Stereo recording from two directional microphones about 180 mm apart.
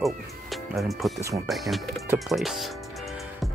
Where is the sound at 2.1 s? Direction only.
Centre (ahead or behind).